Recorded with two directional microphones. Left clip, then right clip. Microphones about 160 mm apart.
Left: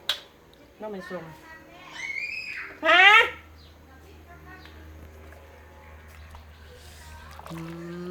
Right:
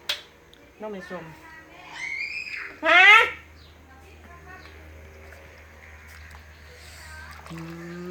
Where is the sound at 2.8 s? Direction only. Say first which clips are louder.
Right 2 dB; 20° left (ahead or behind).